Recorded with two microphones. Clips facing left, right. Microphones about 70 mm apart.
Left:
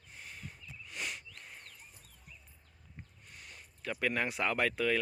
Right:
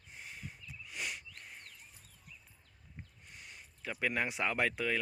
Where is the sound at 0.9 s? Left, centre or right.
Centre.